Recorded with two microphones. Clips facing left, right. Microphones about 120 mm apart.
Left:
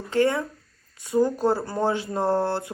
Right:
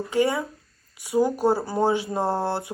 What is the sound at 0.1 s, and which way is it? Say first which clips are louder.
Speech: left 2 dB; 10° right (ahead or behind).